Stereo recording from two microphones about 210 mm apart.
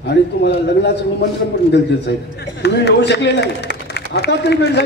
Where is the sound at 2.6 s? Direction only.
55° left (ahead or behind).